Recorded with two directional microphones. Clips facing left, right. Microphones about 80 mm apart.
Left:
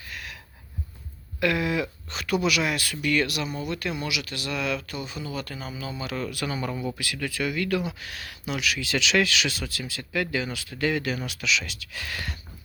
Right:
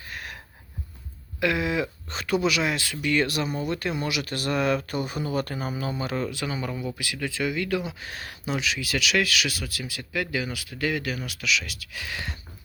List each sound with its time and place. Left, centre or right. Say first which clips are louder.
0.0 s gasp: right 2 dB; right
1.4 s speech: even; centre
3.2 s speech: right 2 dB; right
6.0 s speech: right 1 dB; right
6.2 s speech: even; centre
8.8 s speech: left 3 dB; centre